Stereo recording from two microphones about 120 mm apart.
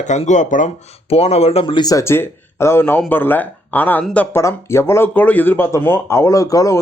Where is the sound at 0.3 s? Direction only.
90° left.